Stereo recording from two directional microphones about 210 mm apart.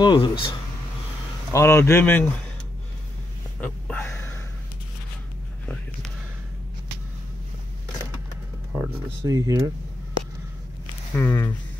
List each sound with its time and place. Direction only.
0.0 s speech: 20° left (ahead or behind)
1.5 s speech: 10° left (ahead or behind)
3.6 s a sound: 5° left (ahead or behind)
8.7 s speech: 15° right (ahead or behind)
11.1 s speech: 10° left (ahead or behind)